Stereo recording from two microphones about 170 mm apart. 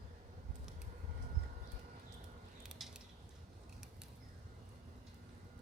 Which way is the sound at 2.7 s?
Centre (ahead or behind).